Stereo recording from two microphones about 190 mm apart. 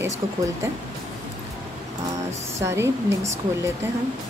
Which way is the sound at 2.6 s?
15° right (ahead or behind).